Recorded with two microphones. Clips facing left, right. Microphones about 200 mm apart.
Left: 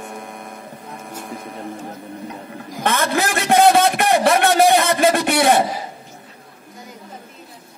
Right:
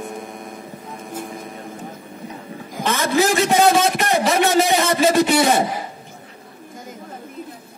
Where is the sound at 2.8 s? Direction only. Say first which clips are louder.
Right 2 dB; 55° left (ahead or behind).